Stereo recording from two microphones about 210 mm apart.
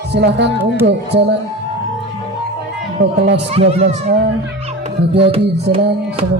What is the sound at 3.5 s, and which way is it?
Speech, 30° right (ahead or behind).